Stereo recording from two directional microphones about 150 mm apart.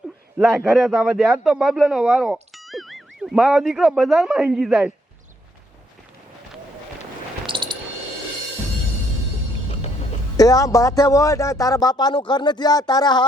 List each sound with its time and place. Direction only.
0.3 s a man's voice: centre (ahead or behind)
7.4 s a sound: 35° right (ahead or behind)
10.3 s a man's voice: 25° left (ahead or behind)